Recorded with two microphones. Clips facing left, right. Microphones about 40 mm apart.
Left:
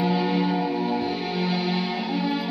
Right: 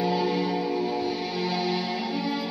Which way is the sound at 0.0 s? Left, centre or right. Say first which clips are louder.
Left 2 dB; left.